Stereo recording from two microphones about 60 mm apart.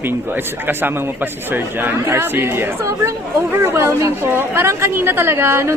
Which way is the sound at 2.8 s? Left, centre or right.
Right.